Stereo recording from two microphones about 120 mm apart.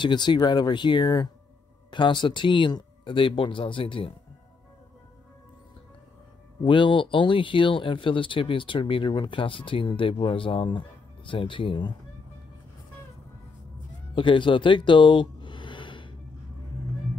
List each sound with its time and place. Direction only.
0.0 s speech: 40° left (ahead or behind)
6.6 s speech: 45° left (ahead or behind)
14.1 s a sound: 45° left (ahead or behind)